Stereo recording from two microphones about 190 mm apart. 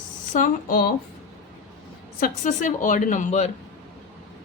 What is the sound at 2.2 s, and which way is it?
Speech, 40° left (ahead or behind).